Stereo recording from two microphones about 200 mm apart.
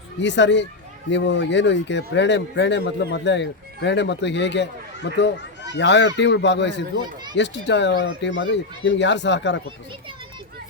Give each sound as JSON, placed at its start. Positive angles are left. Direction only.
{"t": 0.2, "sound": "a man's voice", "side_deg": 65}